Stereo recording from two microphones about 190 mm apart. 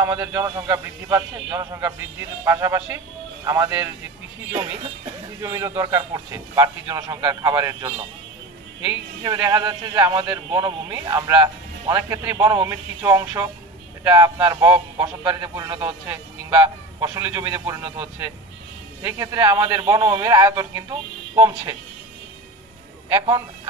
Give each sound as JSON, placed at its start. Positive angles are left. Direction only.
{"t": 0.0, "sound": "speech", "side_deg": -15}
{"t": 5.4, "sound": "speech", "side_deg": -15}
{"t": 9.2, "sound": "speech", "side_deg": -15}
{"t": 19.0, "sound": "speech", "side_deg": -15}
{"t": 23.1, "sound": "speech", "side_deg": -25}